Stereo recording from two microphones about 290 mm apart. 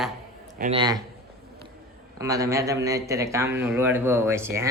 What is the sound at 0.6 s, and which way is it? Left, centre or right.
Speech, centre.